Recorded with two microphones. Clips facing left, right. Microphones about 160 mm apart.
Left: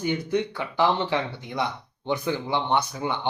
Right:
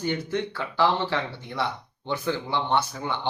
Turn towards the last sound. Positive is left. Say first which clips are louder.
# left 1 dB
turn(degrees=15)  # may be behind; listen again after turning